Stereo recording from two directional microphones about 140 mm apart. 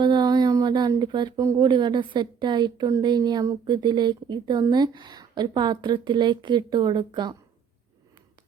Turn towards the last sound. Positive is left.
turn(degrees=-30)  # may be behind; listen again after turning